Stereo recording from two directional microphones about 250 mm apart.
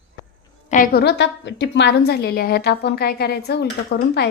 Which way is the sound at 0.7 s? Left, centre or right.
Left.